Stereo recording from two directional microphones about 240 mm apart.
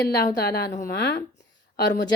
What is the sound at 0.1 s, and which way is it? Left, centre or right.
Speech, left.